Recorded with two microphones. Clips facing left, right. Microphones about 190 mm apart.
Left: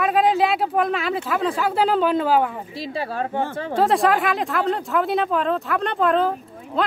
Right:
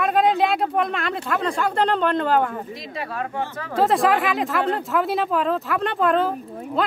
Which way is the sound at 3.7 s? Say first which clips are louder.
Even; centre (ahead or behind).